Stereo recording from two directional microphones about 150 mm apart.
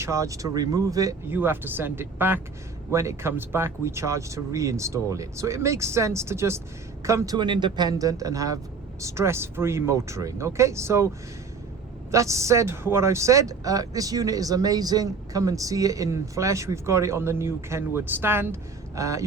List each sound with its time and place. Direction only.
0.0 s speech: 20° right (ahead or behind)
7.3 s speech: 30° right (ahead or behind)
12.1 s speech: 20° right (ahead or behind)